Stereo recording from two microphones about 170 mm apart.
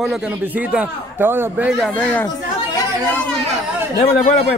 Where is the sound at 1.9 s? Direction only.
10° left (ahead or behind).